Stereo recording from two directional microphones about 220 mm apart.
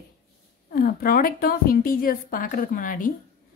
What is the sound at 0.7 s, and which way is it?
A woman's voice, 40° left (ahead or behind).